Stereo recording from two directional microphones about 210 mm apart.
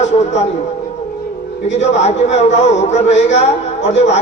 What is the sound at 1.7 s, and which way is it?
A man's voice, 30° left (ahead or behind).